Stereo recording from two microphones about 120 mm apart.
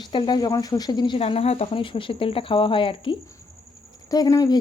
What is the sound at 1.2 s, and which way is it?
Speech, 55° left (ahead or behind).